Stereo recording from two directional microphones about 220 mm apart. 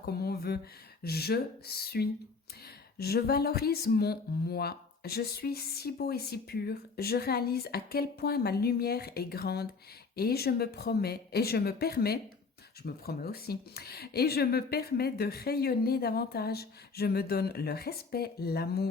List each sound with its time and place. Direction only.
0.0 s speech: 45° left (ahead or behind)